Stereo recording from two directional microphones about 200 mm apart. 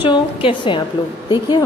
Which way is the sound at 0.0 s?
25° left (ahead or behind).